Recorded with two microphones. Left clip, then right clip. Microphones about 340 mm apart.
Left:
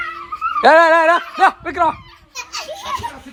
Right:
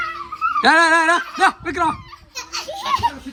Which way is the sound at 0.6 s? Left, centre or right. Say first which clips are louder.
Left 4 dB; centre.